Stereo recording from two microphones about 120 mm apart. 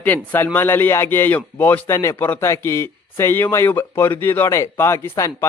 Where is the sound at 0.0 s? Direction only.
15° left (ahead or behind).